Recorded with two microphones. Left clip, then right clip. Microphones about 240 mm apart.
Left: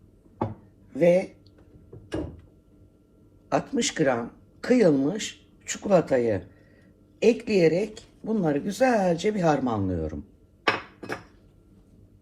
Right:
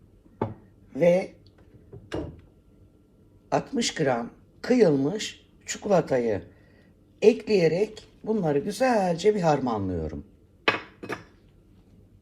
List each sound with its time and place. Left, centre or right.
0.9 s speech: right
3.5 s speech: right